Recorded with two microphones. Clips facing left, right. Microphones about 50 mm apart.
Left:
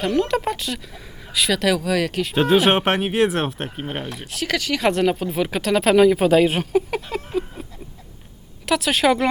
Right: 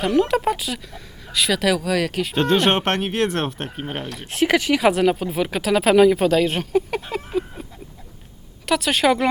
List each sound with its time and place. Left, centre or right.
0.0 s speech: centre
4.4 s speech: right
4.8 s speech: centre
7.0 s a sound: centre
8.6 s speech: centre